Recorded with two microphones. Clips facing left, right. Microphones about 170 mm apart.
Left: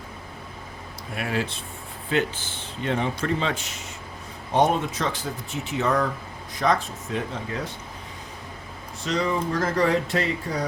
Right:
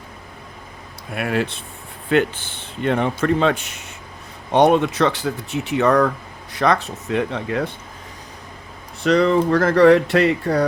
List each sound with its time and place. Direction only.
1.1 s speech: 60° right (ahead or behind)
4.5 s speech: 70° right (ahead or behind)
9.0 s speech: 65° right (ahead or behind)